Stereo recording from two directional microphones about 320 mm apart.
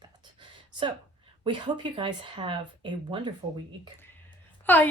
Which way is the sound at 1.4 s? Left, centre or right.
Centre.